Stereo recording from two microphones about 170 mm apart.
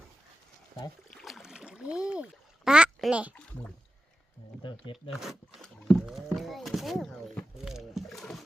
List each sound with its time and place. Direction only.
1.1 s a sound: centre (ahead or behind)
4.6 s speech: 30° left (ahead or behind)
5.2 s roaring cats: centre (ahead or behind)